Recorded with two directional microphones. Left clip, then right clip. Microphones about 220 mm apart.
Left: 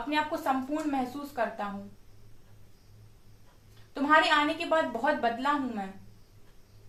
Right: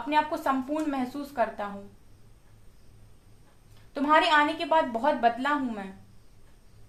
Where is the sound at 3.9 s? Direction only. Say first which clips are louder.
Right 2 dB; 45° right (ahead or behind).